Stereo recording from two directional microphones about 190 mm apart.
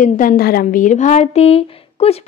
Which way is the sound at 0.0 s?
45° left (ahead or behind).